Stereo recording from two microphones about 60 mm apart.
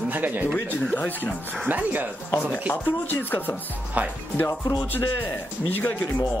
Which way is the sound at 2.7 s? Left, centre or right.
Left.